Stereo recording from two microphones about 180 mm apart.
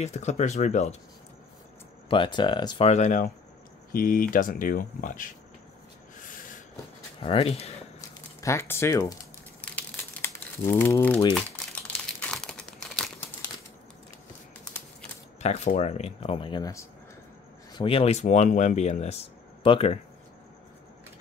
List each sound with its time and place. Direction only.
0.0 s speech: 40° left (ahead or behind)
2.0 s speech: 25° left (ahead or behind)
2.9 s speech: 45° left (ahead or behind)
7.2 s speech: 30° left (ahead or behind)
8.4 s speech: 15° left (ahead or behind)
9.8 s crumpling: 15° left (ahead or behind)
12.2 s crumpling: 5° left (ahead or behind)
15.4 s speech: 40° left (ahead or behind)